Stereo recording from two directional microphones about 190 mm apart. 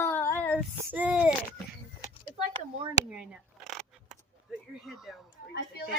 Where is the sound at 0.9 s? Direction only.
5° right (ahead or behind).